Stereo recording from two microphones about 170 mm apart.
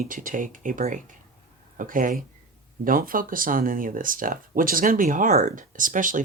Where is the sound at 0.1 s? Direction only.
55° right (ahead or behind).